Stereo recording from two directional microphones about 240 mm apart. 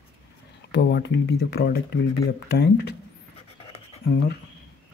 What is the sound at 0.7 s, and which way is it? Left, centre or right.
Speech, left.